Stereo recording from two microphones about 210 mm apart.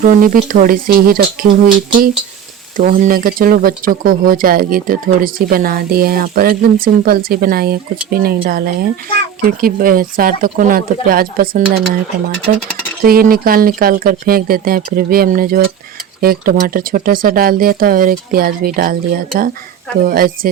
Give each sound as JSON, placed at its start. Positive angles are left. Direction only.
{"t": 0.0, "sound": "speech", "side_deg": -40}
{"t": 13.1, "sound": "speech", "side_deg": -45}